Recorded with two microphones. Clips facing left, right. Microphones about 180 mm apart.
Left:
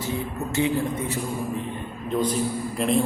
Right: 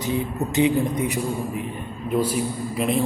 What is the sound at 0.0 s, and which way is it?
A man's voice, 20° right (ahead or behind).